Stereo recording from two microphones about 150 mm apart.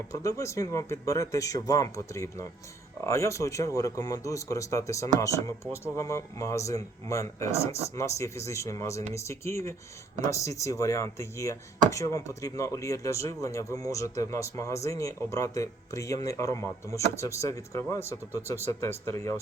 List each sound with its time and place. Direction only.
0.1 s speech: 20° left (ahead or behind)